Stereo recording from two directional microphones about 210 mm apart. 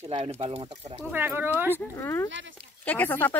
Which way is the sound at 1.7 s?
10° left (ahead or behind).